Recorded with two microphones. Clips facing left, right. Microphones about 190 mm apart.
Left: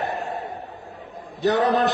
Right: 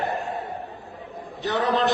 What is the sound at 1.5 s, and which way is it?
Speech, 40° left (ahead or behind).